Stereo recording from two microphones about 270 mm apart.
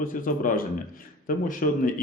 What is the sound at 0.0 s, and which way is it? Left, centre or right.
Speech, left.